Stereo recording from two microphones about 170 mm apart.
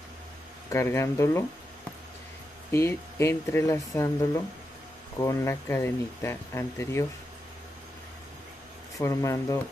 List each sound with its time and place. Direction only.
0.7 s speech: 15° left (ahead or behind)
2.7 s speech: 15° left (ahead or behind)
8.9 s speech: 20° left (ahead or behind)